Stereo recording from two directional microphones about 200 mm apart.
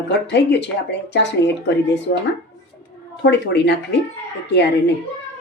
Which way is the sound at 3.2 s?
60° left (ahead or behind).